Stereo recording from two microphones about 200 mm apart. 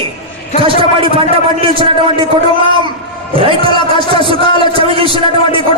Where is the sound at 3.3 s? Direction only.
25° right (ahead or behind).